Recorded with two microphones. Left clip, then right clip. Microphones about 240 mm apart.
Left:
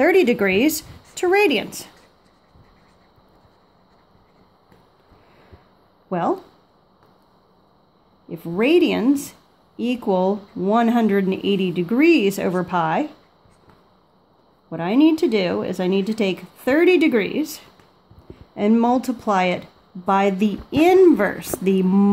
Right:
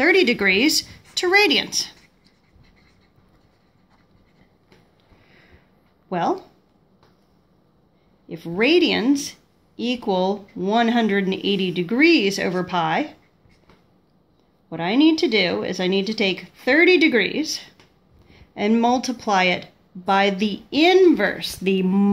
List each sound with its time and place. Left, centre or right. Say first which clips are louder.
0.0 s speech: left 1 dB; left
6.0 s speech: even; left
8.3 s speech: even; left
14.7 s speech: left 1 dB; left